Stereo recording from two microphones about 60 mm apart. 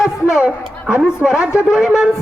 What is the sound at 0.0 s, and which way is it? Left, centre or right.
A woman's voice, centre.